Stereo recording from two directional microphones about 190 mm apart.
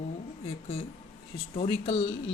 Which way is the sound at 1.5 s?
30° left (ahead or behind).